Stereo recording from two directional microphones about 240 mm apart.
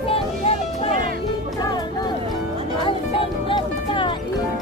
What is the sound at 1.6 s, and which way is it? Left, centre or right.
Music, centre.